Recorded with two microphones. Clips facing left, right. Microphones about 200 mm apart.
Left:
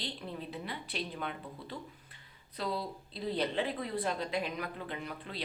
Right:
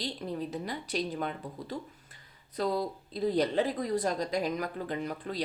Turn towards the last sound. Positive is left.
turn(degrees=-40)  # may be behind; listen again after turning